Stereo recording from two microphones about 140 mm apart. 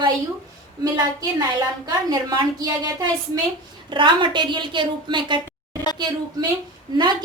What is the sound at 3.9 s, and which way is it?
A woman's voice, 35° right (ahead or behind).